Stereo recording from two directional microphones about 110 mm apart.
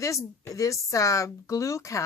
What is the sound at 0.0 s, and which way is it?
Speech, 30° left (ahead or behind).